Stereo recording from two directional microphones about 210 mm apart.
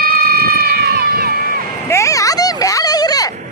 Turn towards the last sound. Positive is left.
turn(degrees=15)  # may be behind; listen again after turning